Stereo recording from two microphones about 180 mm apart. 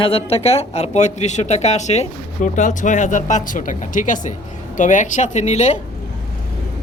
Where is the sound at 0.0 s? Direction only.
30° left (ahead or behind).